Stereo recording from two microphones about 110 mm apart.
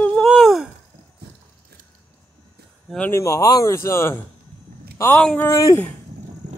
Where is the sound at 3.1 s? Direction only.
30° left (ahead or behind).